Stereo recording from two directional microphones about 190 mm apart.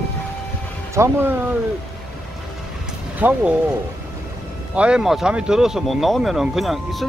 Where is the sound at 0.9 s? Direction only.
15° right (ahead or behind).